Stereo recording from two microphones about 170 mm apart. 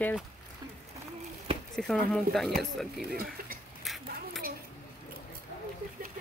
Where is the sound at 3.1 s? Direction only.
60° right (ahead or behind).